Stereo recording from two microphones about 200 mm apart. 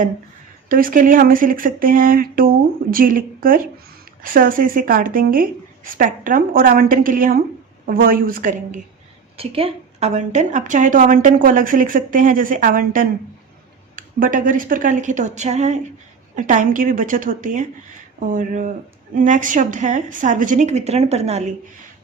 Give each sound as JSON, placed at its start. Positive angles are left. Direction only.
{"t": 0.7, "sound": "a woman's voice", "side_deg": -45}
{"t": 9.4, "sound": "a woman's voice", "side_deg": -30}